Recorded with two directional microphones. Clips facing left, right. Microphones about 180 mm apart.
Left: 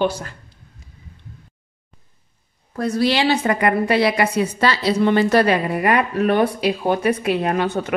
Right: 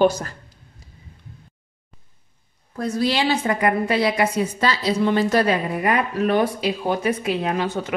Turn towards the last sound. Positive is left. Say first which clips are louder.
# left 3 dB
turn(degrees=60)  # may be behind; listen again after turning